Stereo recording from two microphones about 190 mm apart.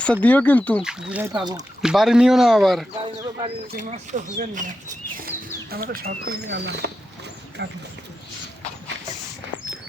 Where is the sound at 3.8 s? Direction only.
40° right (ahead or behind).